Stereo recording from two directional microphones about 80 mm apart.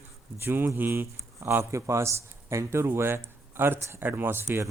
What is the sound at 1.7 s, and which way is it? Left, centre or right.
Speech, right.